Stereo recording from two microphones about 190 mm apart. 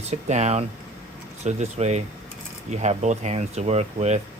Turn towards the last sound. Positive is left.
turn(degrees=-35)  # may be behind; listen again after turning